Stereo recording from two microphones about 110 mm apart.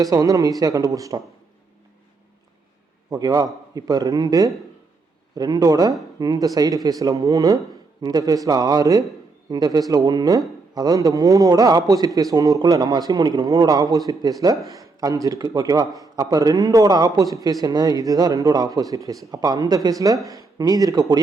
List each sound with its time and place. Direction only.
0.0 s speech: 35° right (ahead or behind)
3.1 s speech: 35° right (ahead or behind)